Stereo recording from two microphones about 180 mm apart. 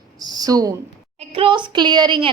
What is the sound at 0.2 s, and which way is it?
A woman's voice, 20° right (ahead or behind).